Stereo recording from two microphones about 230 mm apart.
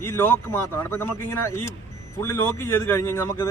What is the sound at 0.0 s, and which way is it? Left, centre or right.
A man's voice, centre.